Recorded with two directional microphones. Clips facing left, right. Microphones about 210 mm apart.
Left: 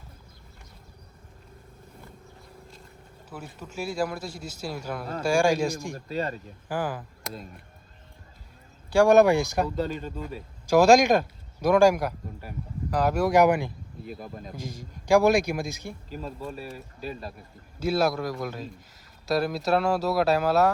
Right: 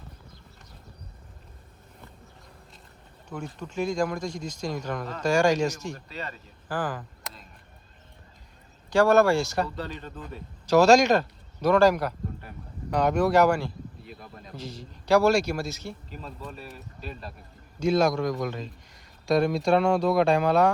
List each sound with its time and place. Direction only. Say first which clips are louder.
3.2 s speech: right 4 dB; 5° left (ahead or behind)
5.9 s speech: left 7 dB; 45° left (ahead or behind)
6.7 s speech: left 1 dB; 10° left (ahead or behind)
8.9 s speech: left 2 dB; 15° left (ahead or behind)
14.1 s speech: left 6 dB; 45° left (ahead or behind)
14.5 s speech: left 1 dB; 10° left (ahead or behind)
16.0 s speech: left 4 dB; 40° left (ahead or behind)
16.6 s speech: left 4 dB; 5° left (ahead or behind)